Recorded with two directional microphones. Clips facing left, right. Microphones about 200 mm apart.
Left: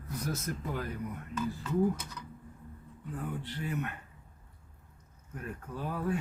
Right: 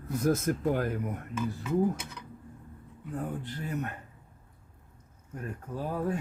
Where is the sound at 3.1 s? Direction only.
40° right (ahead or behind).